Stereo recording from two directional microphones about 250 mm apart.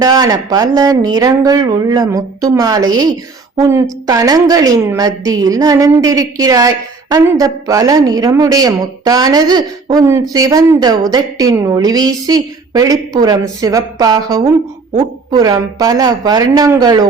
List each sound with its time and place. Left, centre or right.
0.0 s speech: centre